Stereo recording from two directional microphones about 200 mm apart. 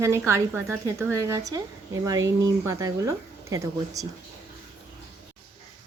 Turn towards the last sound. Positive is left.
turn(degrees=-15)  # may be behind; listen again after turning